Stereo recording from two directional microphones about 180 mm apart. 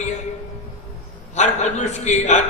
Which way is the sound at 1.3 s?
40° left (ahead or behind).